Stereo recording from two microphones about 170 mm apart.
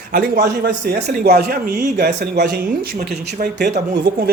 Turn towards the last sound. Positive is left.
turn(degrees=-65)  # may be behind; listen again after turning